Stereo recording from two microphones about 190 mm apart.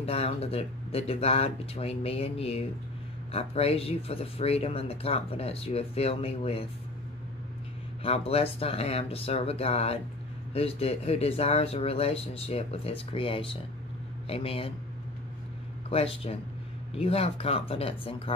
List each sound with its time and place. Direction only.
0.0 s speech: 30° left (ahead or behind)
8.0 s speech: 30° left (ahead or behind)
15.9 s speech: 30° left (ahead or behind)